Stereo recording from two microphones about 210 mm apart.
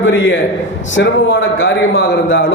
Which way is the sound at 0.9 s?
60° left (ahead or behind).